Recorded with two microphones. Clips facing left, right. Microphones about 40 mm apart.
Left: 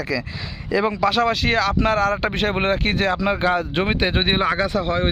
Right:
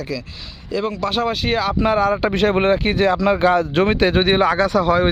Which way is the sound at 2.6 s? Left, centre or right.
Left.